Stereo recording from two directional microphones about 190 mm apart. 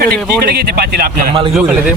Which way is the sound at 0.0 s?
55° right (ahead or behind).